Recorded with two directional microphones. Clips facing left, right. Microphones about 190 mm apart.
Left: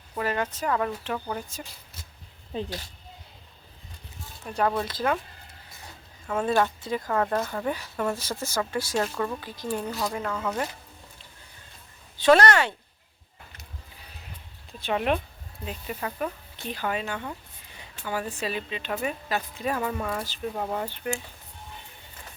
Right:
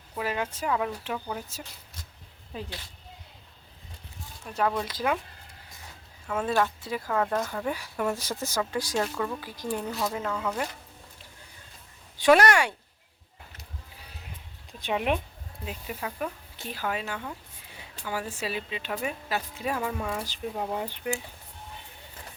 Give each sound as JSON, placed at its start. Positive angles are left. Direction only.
{"t": 0.2, "sound": "speech", "side_deg": -10}
{"t": 2.5, "sound": "speech", "side_deg": 25}
{"t": 4.4, "sound": "speech", "side_deg": 0}
{"t": 4.9, "sound": "speech", "side_deg": -10}
{"t": 6.3, "sound": "speech", "side_deg": 0}
{"t": 7.8, "sound": "speech", "side_deg": -15}
{"t": 9.0, "sound": "speech", "side_deg": 0}
{"t": 9.5, "sound": "speech", "side_deg": -15}
{"t": 9.9, "sound": "speech", "side_deg": 0}
{"t": 12.1, "sound": "speech", "side_deg": -10}
{"t": 14.7, "sound": "speech", "side_deg": -15}